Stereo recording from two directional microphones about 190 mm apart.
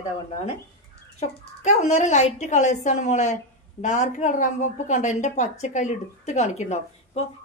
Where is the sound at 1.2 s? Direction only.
35° left (ahead or behind).